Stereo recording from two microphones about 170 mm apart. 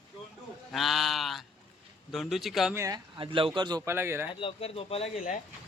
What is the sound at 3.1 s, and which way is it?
Speech, 30° right (ahead or behind).